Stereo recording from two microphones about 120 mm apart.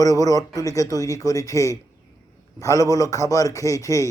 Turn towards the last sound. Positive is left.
turn(degrees=25)  # may be behind; listen again after turning